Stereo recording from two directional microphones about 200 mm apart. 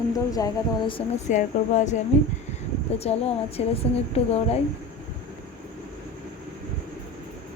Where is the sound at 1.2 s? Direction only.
35° left (ahead or behind).